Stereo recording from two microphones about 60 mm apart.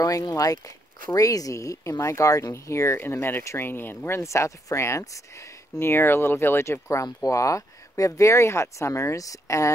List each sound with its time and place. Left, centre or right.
0.0 s speech: left
4.2 s speech: left
5.8 s speech: left
7.2 s speech: left